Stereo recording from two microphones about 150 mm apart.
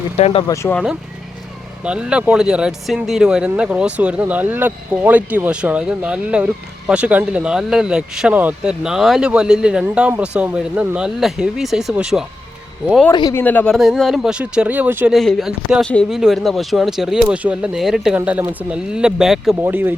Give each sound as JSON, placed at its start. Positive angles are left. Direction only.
{"t": 0.2, "sound": "speech", "side_deg": 40}
{"t": 0.4, "sound": "speech", "side_deg": 20}
{"t": 1.8, "sound": "speech", "side_deg": -5}
{"t": 13.1, "sound": "speech", "side_deg": 30}
{"t": 13.3, "sound": "speech", "side_deg": 10}
{"t": 13.7, "sound": "speech", "side_deg": 0}
{"t": 15.1, "sound": "speech", "side_deg": 0}
{"t": 19.6, "sound": "speech", "side_deg": -15}